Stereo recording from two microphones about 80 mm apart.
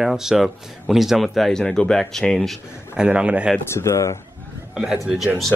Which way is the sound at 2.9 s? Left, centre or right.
Centre.